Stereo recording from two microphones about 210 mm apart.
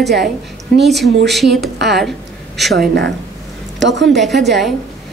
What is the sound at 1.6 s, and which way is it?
Speech, 50° right (ahead or behind).